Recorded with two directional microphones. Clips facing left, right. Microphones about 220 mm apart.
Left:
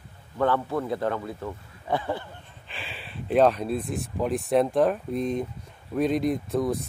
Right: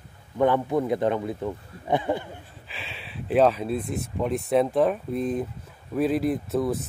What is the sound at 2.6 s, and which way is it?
Speech, centre (ahead or behind).